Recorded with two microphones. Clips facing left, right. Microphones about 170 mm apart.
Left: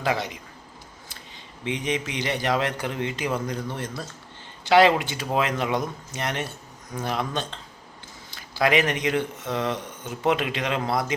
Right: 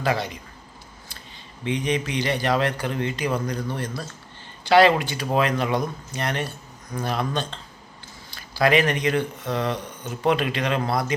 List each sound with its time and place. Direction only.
0.0 s speech: 20° left (ahead or behind)
1.6 s speech: 20° left (ahead or behind)